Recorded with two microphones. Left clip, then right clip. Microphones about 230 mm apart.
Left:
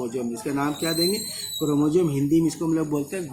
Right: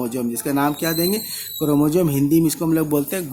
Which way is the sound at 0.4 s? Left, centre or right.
Right.